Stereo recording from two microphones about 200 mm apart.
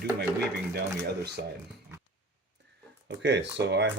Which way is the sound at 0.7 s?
55° right (ahead or behind).